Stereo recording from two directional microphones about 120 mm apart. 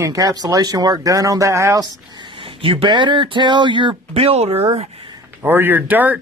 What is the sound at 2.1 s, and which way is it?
Speech, 45° right (ahead or behind).